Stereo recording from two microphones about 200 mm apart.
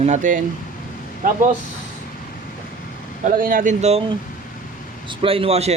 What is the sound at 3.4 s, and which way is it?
Speech, 40° right (ahead or behind).